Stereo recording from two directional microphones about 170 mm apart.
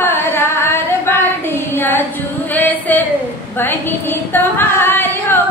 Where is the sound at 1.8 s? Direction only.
10° left (ahead or behind).